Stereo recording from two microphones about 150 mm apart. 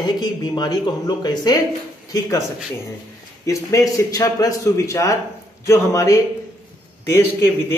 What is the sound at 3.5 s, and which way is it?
A man's voice, 20° left (ahead or behind).